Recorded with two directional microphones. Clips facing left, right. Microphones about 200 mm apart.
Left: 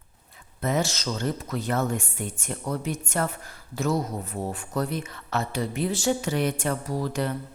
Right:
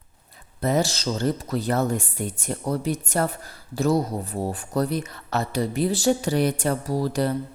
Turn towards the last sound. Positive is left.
turn(degrees=-35)  # may be behind; listen again after turning